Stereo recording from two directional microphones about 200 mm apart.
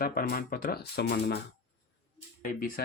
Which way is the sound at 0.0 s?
45° left (ahead or behind).